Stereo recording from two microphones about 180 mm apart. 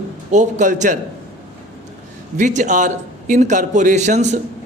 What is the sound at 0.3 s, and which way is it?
Speech, 40° right (ahead or behind).